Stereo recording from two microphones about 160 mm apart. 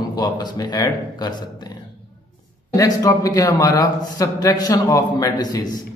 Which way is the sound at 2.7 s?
20° left (ahead or behind).